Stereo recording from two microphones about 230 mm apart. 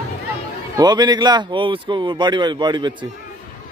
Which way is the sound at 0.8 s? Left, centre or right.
Centre.